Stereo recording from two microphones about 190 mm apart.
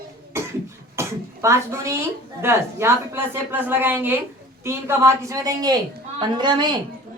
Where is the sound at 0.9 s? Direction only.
15° right (ahead or behind).